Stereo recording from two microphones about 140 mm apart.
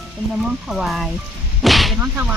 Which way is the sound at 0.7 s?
Centre (ahead or behind).